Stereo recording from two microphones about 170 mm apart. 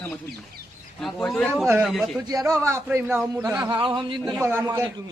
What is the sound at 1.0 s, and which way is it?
Speech, 5° left (ahead or behind).